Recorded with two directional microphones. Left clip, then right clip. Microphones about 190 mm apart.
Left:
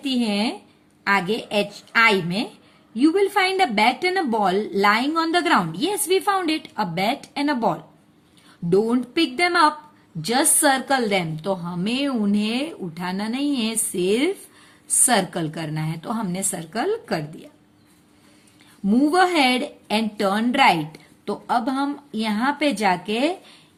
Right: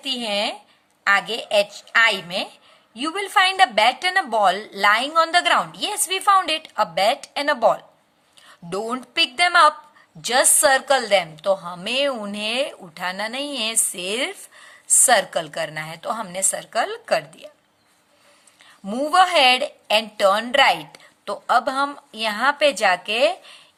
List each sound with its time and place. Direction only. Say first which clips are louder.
0.0 s a woman's voice: right 1 dB; 25° right (ahead or behind)
18.9 s a woman's voice: right 1 dB; 30° right (ahead or behind)